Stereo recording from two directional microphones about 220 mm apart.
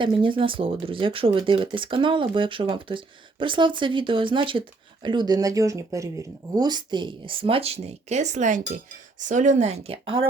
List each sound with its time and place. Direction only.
0.0 s speech: 20° right (ahead or behind)